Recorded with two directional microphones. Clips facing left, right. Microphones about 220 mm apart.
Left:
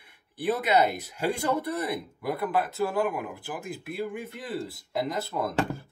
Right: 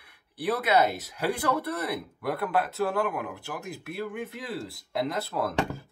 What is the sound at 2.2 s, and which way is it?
Speech, centre (ahead or behind).